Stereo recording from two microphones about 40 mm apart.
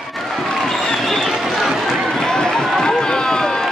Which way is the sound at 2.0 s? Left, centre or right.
Centre.